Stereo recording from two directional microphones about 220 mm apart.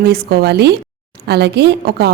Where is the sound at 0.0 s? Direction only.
45° right (ahead or behind).